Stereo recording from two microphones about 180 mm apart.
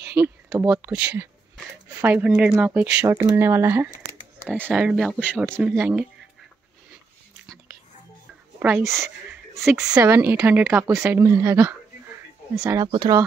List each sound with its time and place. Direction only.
0.0 s a sound: 15° right (ahead or behind)
0.7 s speech: 5° right (ahead or behind)
8.5 s speech: 10° right (ahead or behind)
9.7 s a woman's voice: centre (ahead or behind)
9.9 s speech: 15° right (ahead or behind)